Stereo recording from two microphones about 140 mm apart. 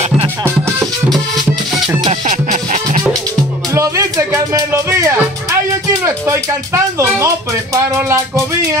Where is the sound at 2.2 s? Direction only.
60° right (ahead or behind).